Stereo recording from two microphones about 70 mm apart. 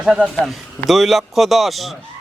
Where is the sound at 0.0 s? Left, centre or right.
Centre.